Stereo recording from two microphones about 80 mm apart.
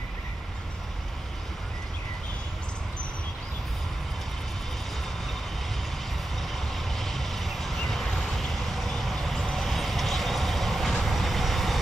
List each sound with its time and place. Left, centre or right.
6.5 s vehicle: centre